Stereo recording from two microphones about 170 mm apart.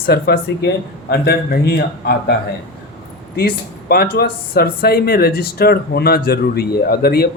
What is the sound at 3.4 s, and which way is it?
Speech, 65° left (ahead or behind).